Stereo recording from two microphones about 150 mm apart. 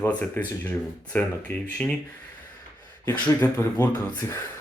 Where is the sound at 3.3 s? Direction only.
15° left (ahead or behind).